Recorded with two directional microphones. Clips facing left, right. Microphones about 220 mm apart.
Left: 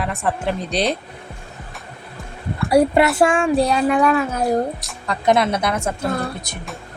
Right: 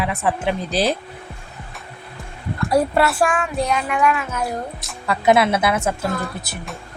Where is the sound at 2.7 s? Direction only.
15° left (ahead or behind); by 4.5 s 35° left (ahead or behind).